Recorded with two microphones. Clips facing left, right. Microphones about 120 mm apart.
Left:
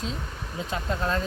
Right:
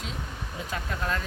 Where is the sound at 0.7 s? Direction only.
25° left (ahead or behind).